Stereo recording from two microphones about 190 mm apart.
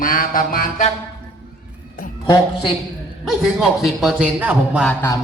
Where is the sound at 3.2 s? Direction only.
Centre (ahead or behind).